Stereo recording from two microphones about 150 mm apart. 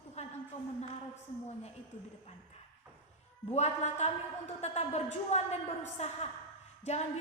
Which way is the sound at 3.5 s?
45° left (ahead or behind).